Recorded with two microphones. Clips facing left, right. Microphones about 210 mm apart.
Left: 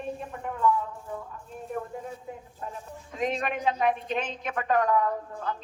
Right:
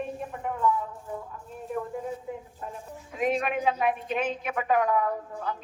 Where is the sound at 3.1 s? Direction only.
5° right (ahead or behind).